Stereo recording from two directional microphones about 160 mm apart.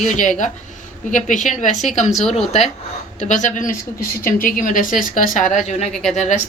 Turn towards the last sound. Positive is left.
turn(degrees=45)  # may be behind; listen again after turning